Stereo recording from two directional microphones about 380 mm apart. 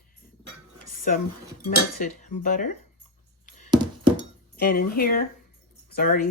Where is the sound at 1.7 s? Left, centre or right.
Left.